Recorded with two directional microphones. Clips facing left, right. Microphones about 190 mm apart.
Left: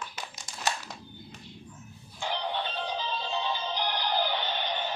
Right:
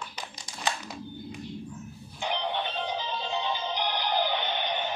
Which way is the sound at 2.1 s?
20° right (ahead or behind).